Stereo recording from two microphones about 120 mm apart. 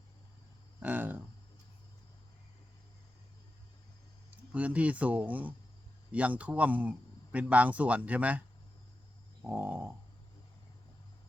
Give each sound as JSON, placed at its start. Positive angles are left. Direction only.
{"t": 0.8, "sound": "a sound", "side_deg": -15}
{"t": 4.3, "sound": "speech", "side_deg": -10}
{"t": 9.4, "sound": "speech", "side_deg": -15}